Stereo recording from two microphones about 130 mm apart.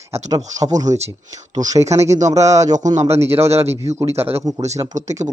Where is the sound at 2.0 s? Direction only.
65° right (ahead or behind).